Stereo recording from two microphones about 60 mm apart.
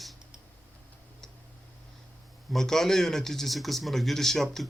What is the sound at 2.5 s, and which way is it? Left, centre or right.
Speech, centre.